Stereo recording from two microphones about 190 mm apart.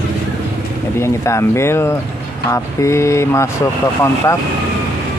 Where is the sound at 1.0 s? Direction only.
15° left (ahead or behind).